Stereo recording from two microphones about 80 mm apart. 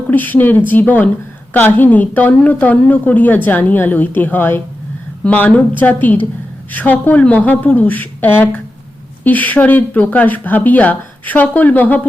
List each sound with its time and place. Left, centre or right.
0.1 s a woman's voice: left